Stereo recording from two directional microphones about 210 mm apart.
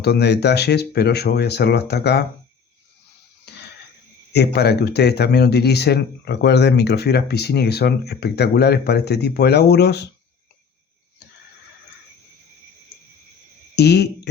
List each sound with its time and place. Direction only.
0.0 s speech: 50° left (ahead or behind)
3.5 s wheeze: 50° left (ahead or behind)
4.3 s speech: 50° left (ahead or behind)
13.7 s speech: 50° left (ahead or behind)